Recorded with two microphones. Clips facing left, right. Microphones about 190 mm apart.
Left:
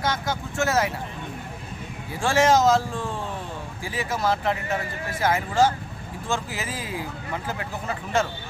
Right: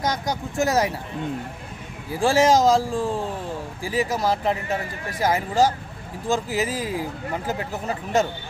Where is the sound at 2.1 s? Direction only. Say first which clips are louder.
Right 2 dB; 35° right (ahead or behind).